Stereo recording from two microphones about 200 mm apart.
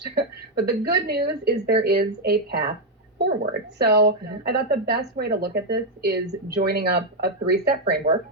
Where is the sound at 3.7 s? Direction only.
55° right (ahead or behind).